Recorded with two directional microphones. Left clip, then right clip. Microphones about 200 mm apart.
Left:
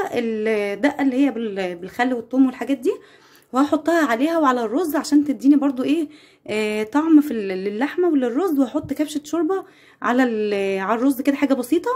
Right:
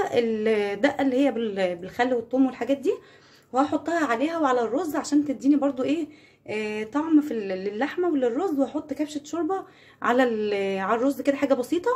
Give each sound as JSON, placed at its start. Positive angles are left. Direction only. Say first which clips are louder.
{"t": 0.0, "sound": "a woman's voice", "louder": "left 1 dB", "side_deg": 20}
{"t": 3.5, "sound": "a woman's voice", "louder": "left 5 dB", "side_deg": 45}
{"t": 10.0, "sound": "a woman's voice", "louder": "left 2 dB", "side_deg": 25}